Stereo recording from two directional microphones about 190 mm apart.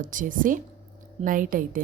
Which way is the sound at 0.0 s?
45° right (ahead or behind).